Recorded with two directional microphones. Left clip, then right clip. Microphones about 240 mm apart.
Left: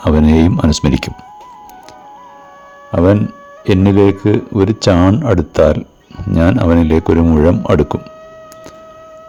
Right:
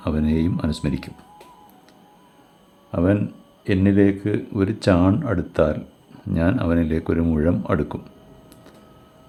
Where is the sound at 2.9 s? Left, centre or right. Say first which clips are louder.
Left 9 dB; left.